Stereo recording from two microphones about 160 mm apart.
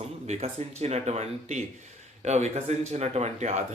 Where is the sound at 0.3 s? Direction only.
45° right (ahead or behind).